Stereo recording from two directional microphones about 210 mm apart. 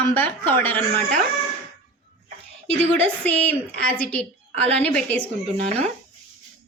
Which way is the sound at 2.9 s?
5° left (ahead or behind).